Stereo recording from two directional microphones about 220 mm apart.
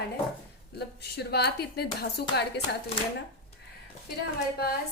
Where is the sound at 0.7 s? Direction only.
45° left (ahead or behind).